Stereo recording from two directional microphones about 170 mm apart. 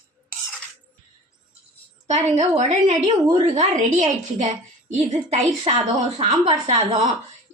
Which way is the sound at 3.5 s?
45° right (ahead or behind).